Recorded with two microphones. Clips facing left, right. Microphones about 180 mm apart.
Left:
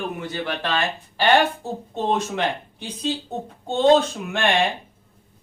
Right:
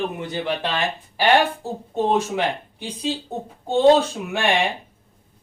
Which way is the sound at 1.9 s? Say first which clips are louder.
Right 3 dB; 10° right (ahead or behind).